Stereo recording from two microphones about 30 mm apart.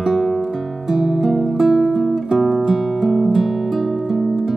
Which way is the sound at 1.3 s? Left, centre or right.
Centre.